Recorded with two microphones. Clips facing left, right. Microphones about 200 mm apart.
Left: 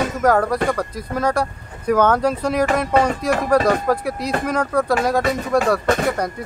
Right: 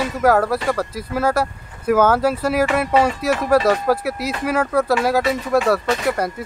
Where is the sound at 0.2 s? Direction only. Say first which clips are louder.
Right 1 dB; 5° right (ahead or behind).